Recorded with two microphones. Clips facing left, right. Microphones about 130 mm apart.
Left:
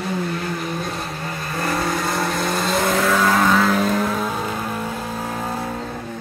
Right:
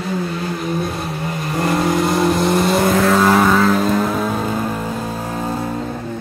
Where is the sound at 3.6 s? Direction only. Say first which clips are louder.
Right 3 dB; centre (ahead or behind).